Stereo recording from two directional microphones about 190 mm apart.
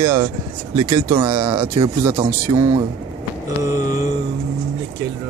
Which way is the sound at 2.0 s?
15° right (ahead or behind).